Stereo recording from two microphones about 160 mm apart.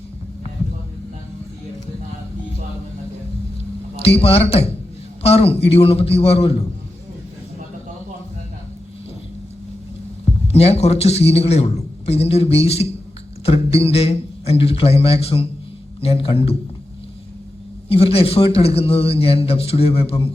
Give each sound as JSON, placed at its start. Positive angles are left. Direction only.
{"t": 4.0, "sound": "a man's voice", "side_deg": 40}
{"t": 10.5, "sound": "a man's voice", "side_deg": 40}
{"t": 17.8, "sound": "a man's voice", "side_deg": 35}